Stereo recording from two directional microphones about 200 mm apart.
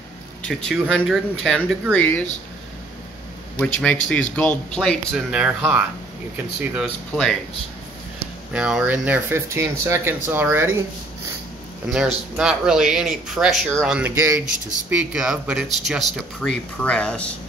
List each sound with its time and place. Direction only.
0.4 s speech: 5° left (ahead or behind)
3.5 s speech: 5° left (ahead or behind)
8.5 s speech: 5° right (ahead or behind)
11.9 s speech: 5° right (ahead or behind)